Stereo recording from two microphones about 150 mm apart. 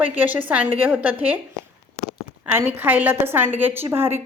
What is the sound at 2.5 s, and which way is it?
Speech, 15° right (ahead or behind).